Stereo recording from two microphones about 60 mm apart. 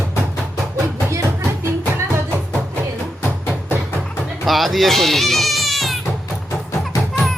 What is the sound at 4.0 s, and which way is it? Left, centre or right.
Music, centre.